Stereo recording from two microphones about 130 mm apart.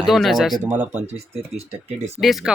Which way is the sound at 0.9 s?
55° right (ahead or behind).